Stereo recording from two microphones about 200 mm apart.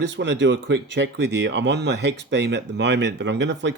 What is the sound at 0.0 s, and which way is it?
Speech, 60° right (ahead or behind).